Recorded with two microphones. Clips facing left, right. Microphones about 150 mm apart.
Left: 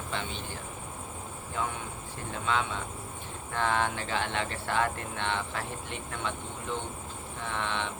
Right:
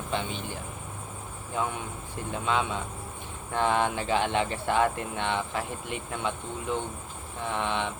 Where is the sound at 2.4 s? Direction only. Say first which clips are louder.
Right 2 dB; 15° right (ahead or behind).